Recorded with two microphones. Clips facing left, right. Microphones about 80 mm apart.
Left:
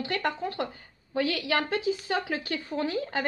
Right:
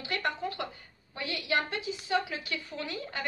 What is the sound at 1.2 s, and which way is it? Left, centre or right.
A woman's voice, left.